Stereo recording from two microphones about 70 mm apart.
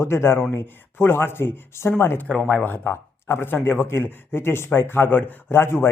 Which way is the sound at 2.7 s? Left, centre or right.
Left.